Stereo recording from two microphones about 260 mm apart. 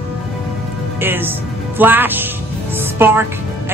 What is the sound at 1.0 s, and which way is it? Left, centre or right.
A man's voice, centre.